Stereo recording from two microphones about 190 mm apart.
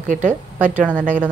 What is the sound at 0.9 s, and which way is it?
Speech, 10° left (ahead or behind).